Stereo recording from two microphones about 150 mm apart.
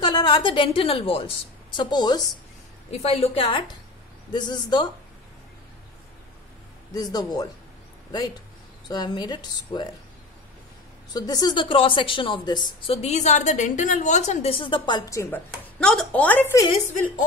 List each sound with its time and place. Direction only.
0.0 s a woman's voice: 30° left (ahead or behind)
2.9 s a woman's voice: 45° left (ahead or behind)
6.9 s speech: 25° left (ahead or behind)
8.8 s speech: 25° left (ahead or behind)
11.1 s a woman's voice: 25° left (ahead or behind)
12.9 s a woman's voice: 45° left (ahead or behind); by 15.4 s 20° left (ahead or behind)
15.8 s speech: 5° left (ahead or behind)